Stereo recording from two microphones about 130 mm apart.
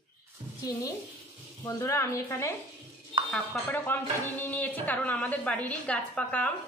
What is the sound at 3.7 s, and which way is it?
A woman's voice, 15° left (ahead or behind).